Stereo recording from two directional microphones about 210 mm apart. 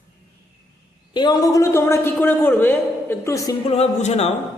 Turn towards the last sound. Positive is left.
turn(degrees=30)  # may be behind; listen again after turning